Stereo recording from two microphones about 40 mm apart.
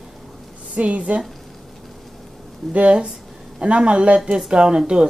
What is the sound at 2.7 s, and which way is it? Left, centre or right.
Speech, right.